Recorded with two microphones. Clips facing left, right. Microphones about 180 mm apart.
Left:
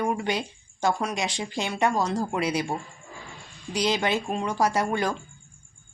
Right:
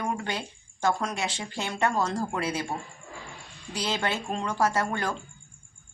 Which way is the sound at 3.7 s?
15° left (ahead or behind).